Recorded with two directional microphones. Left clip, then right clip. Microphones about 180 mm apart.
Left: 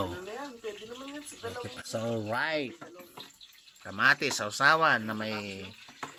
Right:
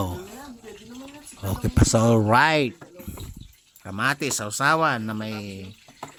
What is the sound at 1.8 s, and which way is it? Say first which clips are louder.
Speech: right 15 dB; 60° right (ahead or behind).